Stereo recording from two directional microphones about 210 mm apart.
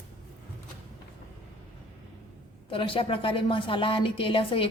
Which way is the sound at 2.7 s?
25° left (ahead or behind).